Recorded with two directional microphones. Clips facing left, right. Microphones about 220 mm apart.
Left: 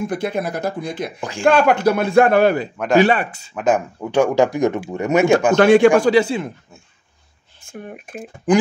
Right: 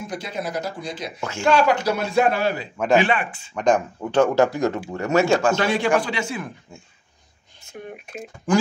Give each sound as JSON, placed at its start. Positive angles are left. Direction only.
{"t": 0.0, "sound": "a man's voice", "side_deg": 55}
{"t": 3.0, "sound": "speech", "side_deg": 40}
{"t": 3.5, "sound": "speech", "side_deg": 5}
{"t": 5.6, "sound": "speech", "side_deg": 50}
{"t": 5.9, "sound": "speech", "side_deg": 40}
{"t": 7.6, "sound": "speech", "side_deg": 50}
{"t": 8.5, "sound": "speech", "side_deg": 20}